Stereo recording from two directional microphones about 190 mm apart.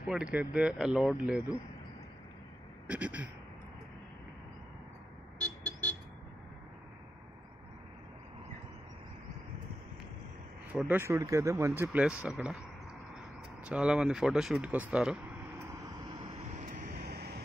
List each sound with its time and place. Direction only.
0.1 s speech: 5° right (ahead or behind)
2.9 s speech: 10° right (ahead or behind)
5.4 s vehicle: 5° left (ahead or behind)
10.7 s speech: 10° right (ahead or behind)
13.7 s speech: 5° right (ahead or behind)
16.1 s vehicle: 25° right (ahead or behind)
16.5 s vehicle: 45° right (ahead or behind)